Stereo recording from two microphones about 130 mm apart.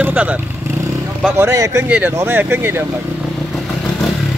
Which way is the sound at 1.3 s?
20° right (ahead or behind).